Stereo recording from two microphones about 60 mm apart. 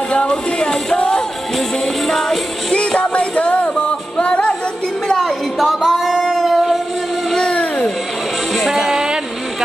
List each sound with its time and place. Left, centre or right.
0.1 s speech: centre
2.0 s music: centre
2.7 s music: centre
5.0 s a sound: centre
5.9 s singing: centre
7.2 s a sound: centre
8.5 s music: centre